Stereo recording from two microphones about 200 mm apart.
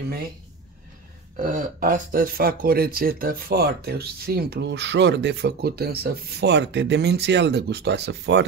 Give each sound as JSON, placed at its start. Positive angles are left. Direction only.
{"t": 1.3, "sound": "speech", "side_deg": -40}